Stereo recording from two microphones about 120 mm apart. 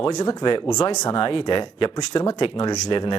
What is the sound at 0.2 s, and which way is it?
Speech, 35° left (ahead or behind).